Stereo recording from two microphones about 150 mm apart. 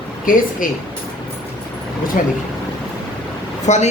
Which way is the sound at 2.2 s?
65° left (ahead or behind).